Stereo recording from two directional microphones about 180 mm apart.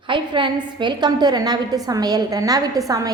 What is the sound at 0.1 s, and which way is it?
A woman's voice, 25° right (ahead or behind).